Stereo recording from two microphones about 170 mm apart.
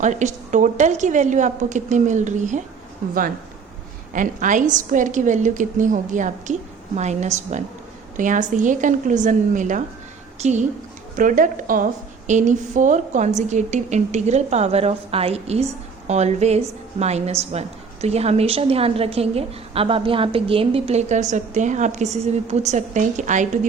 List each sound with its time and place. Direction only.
0.0 s a woman's voice: 45° right (ahead or behind)
4.1 s a woman's voice: 50° right (ahead or behind)